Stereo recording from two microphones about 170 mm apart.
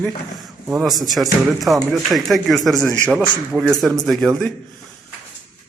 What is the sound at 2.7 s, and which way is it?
Speech, 15° right (ahead or behind).